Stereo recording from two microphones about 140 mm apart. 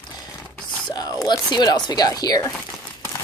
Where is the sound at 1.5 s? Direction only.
30° left (ahead or behind).